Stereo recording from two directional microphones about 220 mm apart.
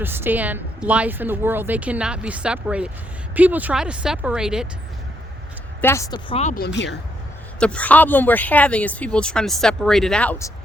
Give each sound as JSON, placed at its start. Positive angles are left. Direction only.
{"t": 0.0, "sound": "a woman's voice", "side_deg": -10}
{"t": 5.8, "sound": "speech", "side_deg": 10}
{"t": 6.6, "sound": "speech", "side_deg": 55}
{"t": 7.6, "sound": "speech", "side_deg": 5}